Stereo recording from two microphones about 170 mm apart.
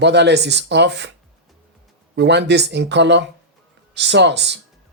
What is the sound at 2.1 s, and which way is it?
Speech, 90° right.